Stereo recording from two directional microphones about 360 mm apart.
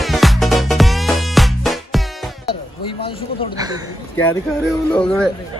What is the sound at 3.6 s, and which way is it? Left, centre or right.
Speech, centre.